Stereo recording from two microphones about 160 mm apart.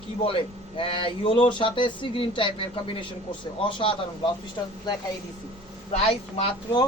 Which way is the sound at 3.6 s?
30° left (ahead or behind).